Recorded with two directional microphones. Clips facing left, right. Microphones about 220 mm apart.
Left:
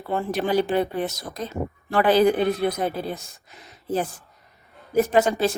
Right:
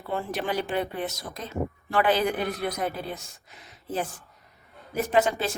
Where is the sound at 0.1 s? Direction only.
40° left (ahead or behind).